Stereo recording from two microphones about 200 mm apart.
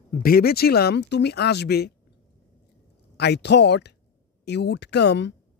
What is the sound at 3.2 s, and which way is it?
Speech, 55° left (ahead or behind).